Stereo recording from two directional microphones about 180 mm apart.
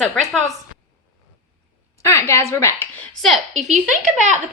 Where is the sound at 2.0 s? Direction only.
15° left (ahead or behind).